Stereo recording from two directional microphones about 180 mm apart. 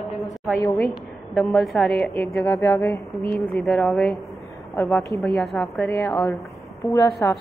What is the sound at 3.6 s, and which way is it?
A woman's voice, centre (ahead or behind).